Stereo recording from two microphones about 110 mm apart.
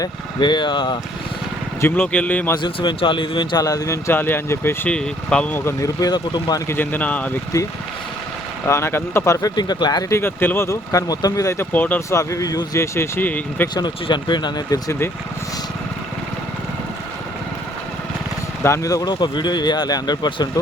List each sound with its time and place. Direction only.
0.3 s speech: 45° left (ahead or behind)
1.8 s speech: 15° left (ahead or behind)
2.6 s speech: 45° left (ahead or behind); by 4.9 s 20° left (ahead or behind)
4.9 s speech: 10° left (ahead or behind); by 6.6 s 40° left (ahead or behind)
6.7 s speech: 15° left (ahead or behind)
8.6 s speech: 25° left (ahead or behind)
9.6 s speech: 40° left (ahead or behind)
10.1 s speech: 20° left (ahead or behind)
11.7 s speech: 15° left (ahead or behind)
12.1 s speech: 30° left (ahead or behind)
13.7 s speech: 45° left (ahead or behind)
18.6 s speech: 30° left (ahead or behind)